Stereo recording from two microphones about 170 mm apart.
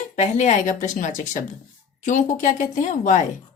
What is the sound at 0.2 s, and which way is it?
Speech, 45° left (ahead or behind).